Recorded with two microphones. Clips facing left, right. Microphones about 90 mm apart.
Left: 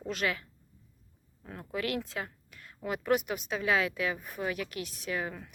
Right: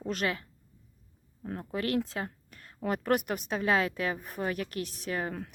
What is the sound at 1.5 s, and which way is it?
A woman's voice, 35° right (ahead or behind).